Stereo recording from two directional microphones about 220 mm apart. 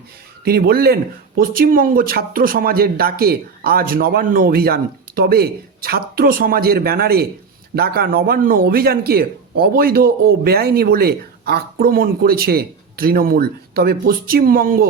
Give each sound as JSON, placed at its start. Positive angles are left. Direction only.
{"t": 0.4, "sound": "a man's voice", "side_deg": -45}